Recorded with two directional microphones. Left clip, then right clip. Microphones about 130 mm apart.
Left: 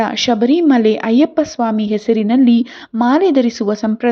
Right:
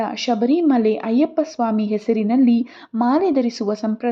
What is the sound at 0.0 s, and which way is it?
A woman's voice, 25° left (ahead or behind).